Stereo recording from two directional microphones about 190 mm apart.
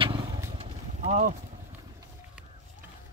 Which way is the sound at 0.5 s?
35° right (ahead or behind).